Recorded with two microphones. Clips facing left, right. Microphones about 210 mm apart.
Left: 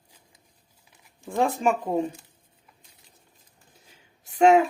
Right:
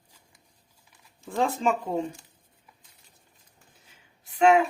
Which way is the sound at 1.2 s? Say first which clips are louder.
Left 2 dB; 15° left (ahead or behind).